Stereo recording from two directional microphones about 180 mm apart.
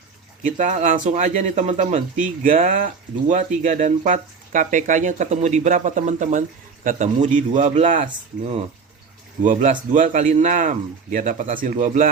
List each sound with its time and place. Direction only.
0.4 s speech: 45° right (ahead or behind)